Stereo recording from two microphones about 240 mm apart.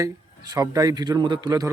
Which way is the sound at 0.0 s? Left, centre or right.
Centre.